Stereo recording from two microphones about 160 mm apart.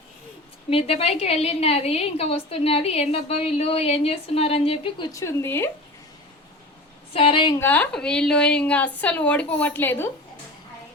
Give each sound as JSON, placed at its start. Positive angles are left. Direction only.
{"t": 0.7, "sound": "a woman's voice", "side_deg": 40}
{"t": 5.1, "sound": "a woman's voice", "side_deg": 15}
{"t": 7.1, "sound": "a woman's voice", "side_deg": 35}
{"t": 7.6, "sound": "a woman's voice", "side_deg": 10}